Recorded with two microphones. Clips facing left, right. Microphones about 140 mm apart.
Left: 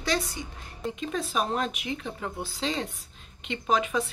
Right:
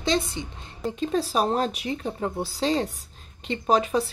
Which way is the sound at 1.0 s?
35° right (ahead or behind).